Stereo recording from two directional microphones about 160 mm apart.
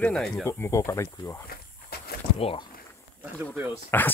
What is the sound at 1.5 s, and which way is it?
Walk, 70° left (ahead or behind).